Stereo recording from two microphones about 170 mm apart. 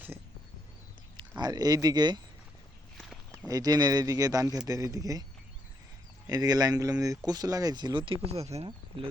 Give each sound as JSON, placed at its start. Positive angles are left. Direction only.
{"t": 1.4, "sound": "speech", "side_deg": -25}
{"t": 3.0, "sound": "a sound", "side_deg": 5}
{"t": 3.5, "sound": "speech", "side_deg": -20}
{"t": 6.2, "sound": "speech", "side_deg": -20}